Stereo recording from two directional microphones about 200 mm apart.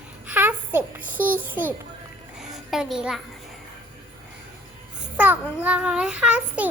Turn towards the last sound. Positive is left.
turn(degrees=-5)  # may be behind; listen again after turning